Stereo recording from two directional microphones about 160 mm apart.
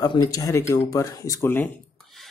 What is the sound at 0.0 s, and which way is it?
Speech, 25° left (ahead or behind).